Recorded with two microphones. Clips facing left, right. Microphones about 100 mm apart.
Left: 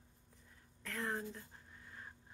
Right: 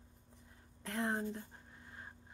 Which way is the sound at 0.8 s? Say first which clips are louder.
Right 4 dB; 25° right (ahead or behind).